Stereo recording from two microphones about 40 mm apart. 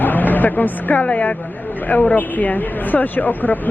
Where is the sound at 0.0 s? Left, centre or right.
Left.